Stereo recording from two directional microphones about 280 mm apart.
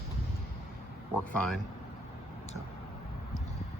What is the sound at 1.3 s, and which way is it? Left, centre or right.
Speech, centre.